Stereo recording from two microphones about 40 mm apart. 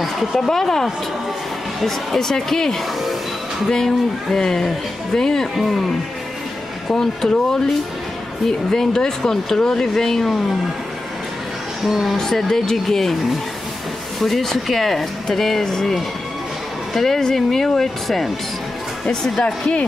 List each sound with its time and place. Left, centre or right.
0.0 s a sound: centre
0.4 s speech: centre
2.1 s speech: centre
6.9 s speech: centre
11.8 s speech: centre
12.2 s speech: centre
14.2 s speech: centre
19.0 s speech: centre